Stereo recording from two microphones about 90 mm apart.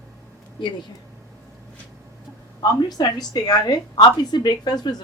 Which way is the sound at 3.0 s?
55° left (ahead or behind).